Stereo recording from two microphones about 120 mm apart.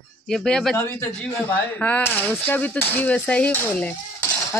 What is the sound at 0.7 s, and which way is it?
A man's voice, 25° left (ahead or behind).